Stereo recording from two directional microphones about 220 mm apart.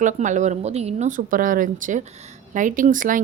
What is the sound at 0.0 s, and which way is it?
A woman's voice, 35° right (ahead or behind).